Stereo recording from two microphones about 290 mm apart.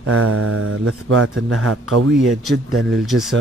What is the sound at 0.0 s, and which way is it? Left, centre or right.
Speech, right.